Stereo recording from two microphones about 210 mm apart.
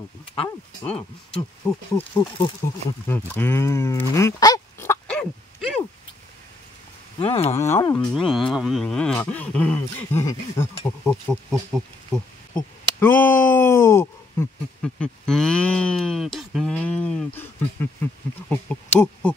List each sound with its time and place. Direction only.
1.6 s speech: 15° left (ahead or behind)
7.2 s speech: 25° left (ahead or behind)
7.5 s speech: 15° left (ahead or behind)
8.2 s speech: centre (ahead or behind)
11.7 s speech: centre (ahead or behind)
12.5 s a sound: 10° left (ahead or behind)